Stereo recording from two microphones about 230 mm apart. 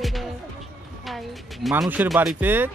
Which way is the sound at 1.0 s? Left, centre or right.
Centre.